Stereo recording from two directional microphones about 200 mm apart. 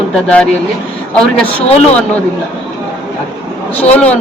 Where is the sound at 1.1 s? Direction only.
5° left (ahead or behind).